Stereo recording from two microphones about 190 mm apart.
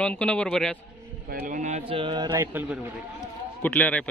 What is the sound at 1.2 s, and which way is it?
Speech, 45° right (ahead or behind).